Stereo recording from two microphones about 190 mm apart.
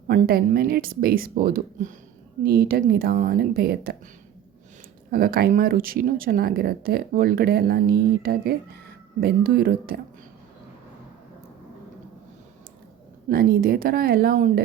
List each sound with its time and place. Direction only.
0.1 s speech: 50° right (ahead or behind)
5.1 s speech: 50° right (ahead or behind)
13.2 s speech: 50° right (ahead or behind)